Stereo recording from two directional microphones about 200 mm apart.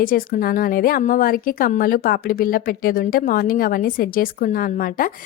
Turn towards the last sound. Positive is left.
turn(degrees=45)  # may be behind; listen again after turning